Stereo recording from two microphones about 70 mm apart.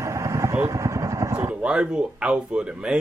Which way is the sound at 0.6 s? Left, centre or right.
Right.